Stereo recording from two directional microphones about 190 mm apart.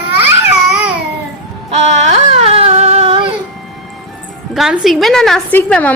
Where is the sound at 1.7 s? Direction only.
35° right (ahead or behind).